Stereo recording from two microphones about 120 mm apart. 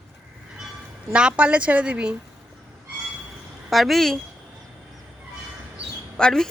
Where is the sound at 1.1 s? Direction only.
10° right (ahead or behind).